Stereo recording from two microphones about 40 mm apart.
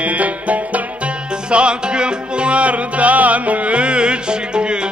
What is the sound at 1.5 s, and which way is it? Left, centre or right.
Music, right.